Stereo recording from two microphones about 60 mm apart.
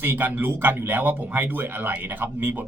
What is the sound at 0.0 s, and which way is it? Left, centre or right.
Speech, right.